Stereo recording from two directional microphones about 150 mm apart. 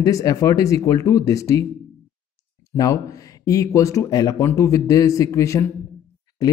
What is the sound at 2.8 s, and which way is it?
A man's voice, 25° left (ahead or behind).